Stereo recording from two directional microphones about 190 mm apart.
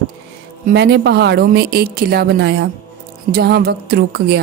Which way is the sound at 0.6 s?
60° right (ahead or behind).